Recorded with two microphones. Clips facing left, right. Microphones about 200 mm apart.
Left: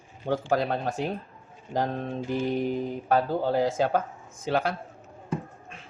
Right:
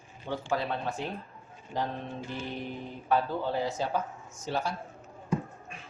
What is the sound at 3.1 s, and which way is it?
Speech, 40° left (ahead or behind).